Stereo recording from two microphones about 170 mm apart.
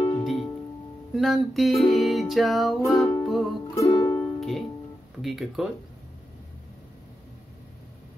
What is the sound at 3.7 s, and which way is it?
Music, 20° left (ahead or behind).